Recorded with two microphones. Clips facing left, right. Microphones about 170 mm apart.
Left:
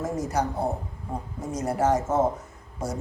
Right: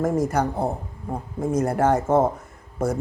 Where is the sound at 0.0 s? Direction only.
55° right (ahead or behind).